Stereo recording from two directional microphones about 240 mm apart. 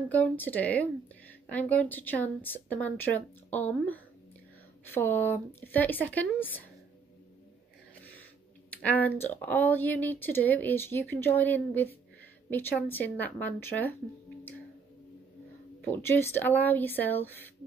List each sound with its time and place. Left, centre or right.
0.1 s speech: centre
8.8 s speech: centre
15.8 s speech: centre